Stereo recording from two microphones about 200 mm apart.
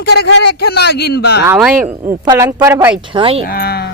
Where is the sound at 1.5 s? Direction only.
5° right (ahead or behind).